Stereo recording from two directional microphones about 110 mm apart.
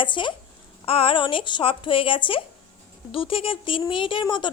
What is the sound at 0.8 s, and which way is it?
A woman's voice, 60° left (ahead or behind).